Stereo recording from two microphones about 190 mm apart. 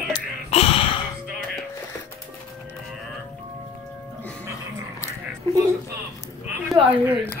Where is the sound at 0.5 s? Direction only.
30° left (ahead or behind).